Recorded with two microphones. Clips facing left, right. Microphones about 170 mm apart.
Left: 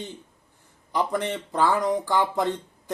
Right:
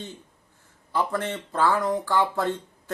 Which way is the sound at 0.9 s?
15° left (ahead or behind).